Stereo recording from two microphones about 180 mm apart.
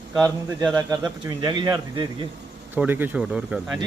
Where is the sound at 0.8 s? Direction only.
20° right (ahead or behind).